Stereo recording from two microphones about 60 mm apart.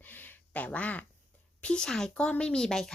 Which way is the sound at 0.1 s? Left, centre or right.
Left.